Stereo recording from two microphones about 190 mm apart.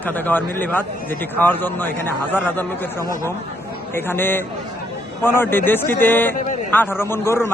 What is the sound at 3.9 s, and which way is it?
A man's voice, 10° left (ahead or behind).